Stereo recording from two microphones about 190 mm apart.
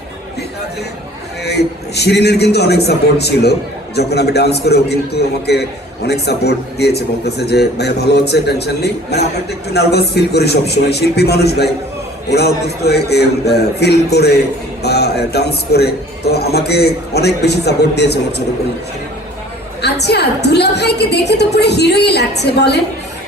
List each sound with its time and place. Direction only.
1.5 s a man's voice: 60° left (ahead or behind)
19.8 s a man's voice: 60° left (ahead or behind)